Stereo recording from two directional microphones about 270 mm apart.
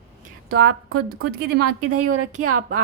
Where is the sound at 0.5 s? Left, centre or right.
Right.